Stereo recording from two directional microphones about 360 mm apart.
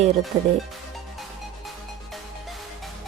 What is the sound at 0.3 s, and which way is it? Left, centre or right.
Speech, centre.